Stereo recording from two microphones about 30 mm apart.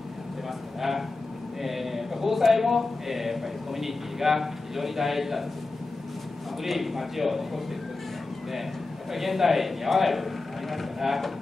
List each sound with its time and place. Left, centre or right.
0.7 s a sound: centre
1.6 s speech: centre
6.6 s a man's voice: centre
9.1 s a man's voice: centre